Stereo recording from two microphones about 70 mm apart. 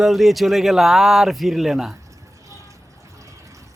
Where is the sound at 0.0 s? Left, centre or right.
Centre.